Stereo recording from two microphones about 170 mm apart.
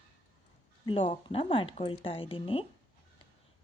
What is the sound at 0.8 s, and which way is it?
Speech, 35° left (ahead or behind).